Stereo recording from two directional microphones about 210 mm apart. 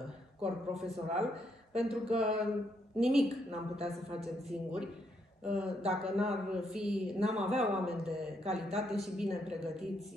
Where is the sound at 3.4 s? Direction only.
30° right (ahead or behind).